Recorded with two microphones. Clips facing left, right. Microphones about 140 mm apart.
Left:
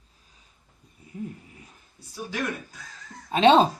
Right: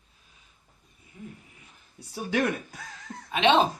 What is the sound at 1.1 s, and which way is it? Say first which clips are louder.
Speech: left 9 dB; 40° left (ahead or behind).